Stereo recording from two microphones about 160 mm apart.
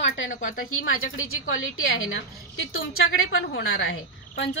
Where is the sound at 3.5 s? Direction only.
90° left.